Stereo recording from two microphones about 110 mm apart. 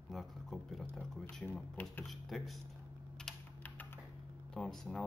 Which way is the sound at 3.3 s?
5° left (ahead or behind).